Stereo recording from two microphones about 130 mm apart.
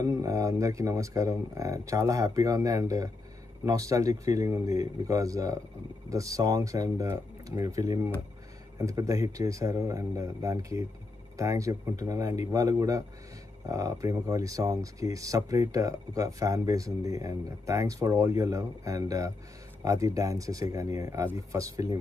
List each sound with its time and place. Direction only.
0.0 s speech: 25° right (ahead or behind)